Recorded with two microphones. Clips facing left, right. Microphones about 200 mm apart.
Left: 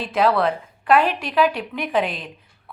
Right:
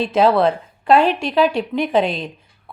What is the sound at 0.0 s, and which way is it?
A woman's voice, 25° right (ahead or behind).